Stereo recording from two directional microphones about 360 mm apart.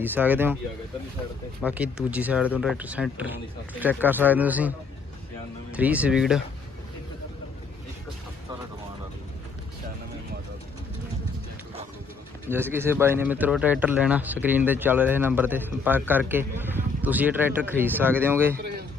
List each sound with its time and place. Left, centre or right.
0.0 s speech: centre
1.6 s speech: centre
5.7 s speech: centre
12.5 s speech: centre
18.5 s a sound: right